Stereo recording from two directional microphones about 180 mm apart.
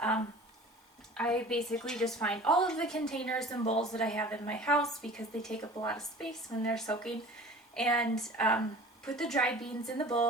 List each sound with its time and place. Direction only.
1.1 s a woman's voice: 5° left (ahead or behind)